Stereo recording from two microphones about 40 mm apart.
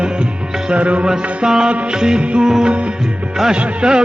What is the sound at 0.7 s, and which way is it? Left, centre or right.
Music, right.